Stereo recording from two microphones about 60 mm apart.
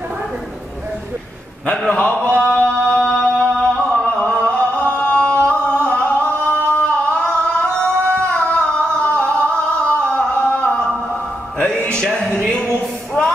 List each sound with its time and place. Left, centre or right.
1.9 s mantra: left
2.3 s music: left
3.5 s a sound: centre
5.5 s singing: left
8.0 s a sound: right
8.3 s singing: centre
11.6 s music: centre